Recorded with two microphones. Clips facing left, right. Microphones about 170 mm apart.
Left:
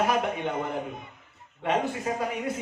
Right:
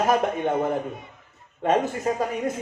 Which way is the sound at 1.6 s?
40° right (ahead or behind).